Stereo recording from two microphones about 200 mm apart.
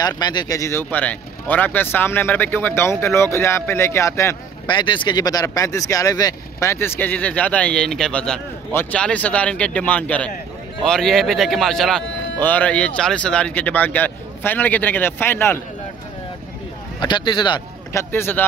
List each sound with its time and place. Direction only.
0.0 s speech: 20° left (ahead or behind)
17.0 s speech: 20° left (ahead or behind)
18.1 s speech: 10° left (ahead or behind)